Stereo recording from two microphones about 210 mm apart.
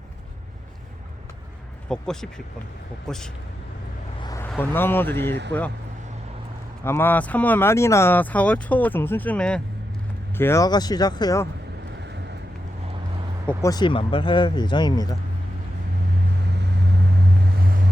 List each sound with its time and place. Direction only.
1.9 s speech: 5° left (ahead or behind)
4.2 s a sound: 15° left (ahead or behind)
4.4 s speech: 10° left (ahead or behind)
5.3 s speech: 55° right (ahead or behind)
6.8 s speech: 10° left (ahead or behind)
13.5 s speech: 15° left (ahead or behind)